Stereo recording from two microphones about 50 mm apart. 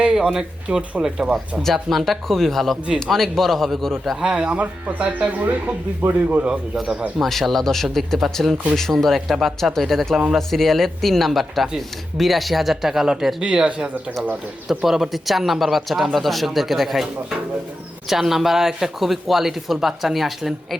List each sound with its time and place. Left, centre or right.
0.0 s speech: centre
1.6 s speech: centre
4.2 s speech: centre
7.2 s speech: centre
13.4 s speech: right; by 17.1 s centre
18.1 s speech: centre